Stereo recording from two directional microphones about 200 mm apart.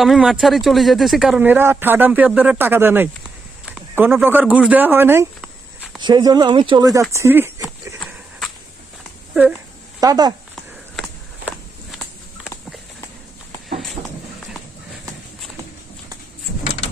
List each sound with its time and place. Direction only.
0.0 s speech: centre (ahead or behind)
5.9 s speech: 20° right (ahead or behind)
9.9 s speech: 20° right (ahead or behind)
14.0 s a sound: 20° right (ahead or behind)